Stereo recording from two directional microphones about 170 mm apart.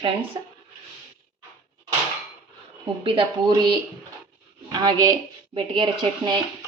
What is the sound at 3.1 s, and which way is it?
A woman's voice, 30° right (ahead or behind).